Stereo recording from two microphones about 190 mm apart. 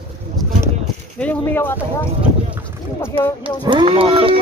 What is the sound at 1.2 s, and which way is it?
Speech, 10° left (ahead or behind).